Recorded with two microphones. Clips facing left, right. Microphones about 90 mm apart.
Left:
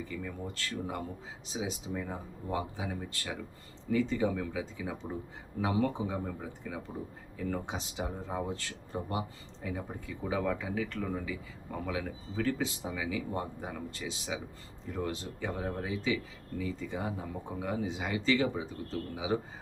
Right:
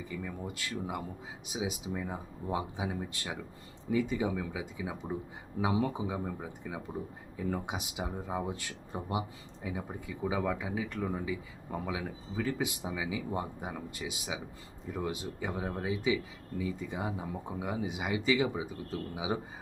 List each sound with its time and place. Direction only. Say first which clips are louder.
0.0 s speech: even; 10° right (ahead or behind)